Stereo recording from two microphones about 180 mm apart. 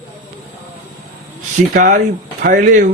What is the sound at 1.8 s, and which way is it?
Speech, 45° right (ahead or behind).